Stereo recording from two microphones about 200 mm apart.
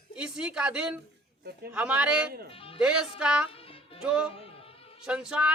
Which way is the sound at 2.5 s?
30° left (ahead or behind).